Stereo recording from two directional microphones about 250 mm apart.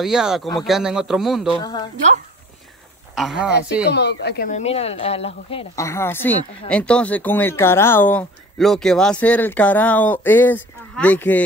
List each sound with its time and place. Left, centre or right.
0.0 s a man's voice: centre
1.6 s speech: centre
3.2 s a man's voice: centre
3.9 s speech: left
5.9 s speech: centre